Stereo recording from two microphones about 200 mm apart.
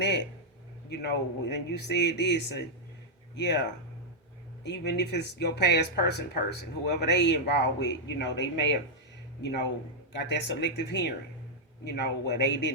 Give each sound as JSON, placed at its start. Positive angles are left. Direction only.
{"t": 0.9, "sound": "speech", "side_deg": 55}
{"t": 4.6, "sound": "speech", "side_deg": 60}